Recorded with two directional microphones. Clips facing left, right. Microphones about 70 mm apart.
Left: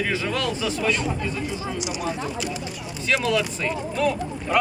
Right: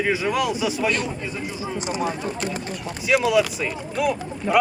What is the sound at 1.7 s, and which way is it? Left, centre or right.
Speech, right.